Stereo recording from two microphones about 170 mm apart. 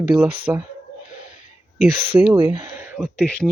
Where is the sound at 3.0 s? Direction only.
5° left (ahead or behind).